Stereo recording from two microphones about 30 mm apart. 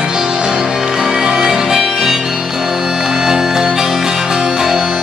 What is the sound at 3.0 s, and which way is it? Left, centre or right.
Music, centre.